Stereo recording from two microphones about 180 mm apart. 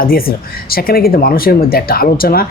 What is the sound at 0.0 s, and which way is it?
Speech, 55° left (ahead or behind).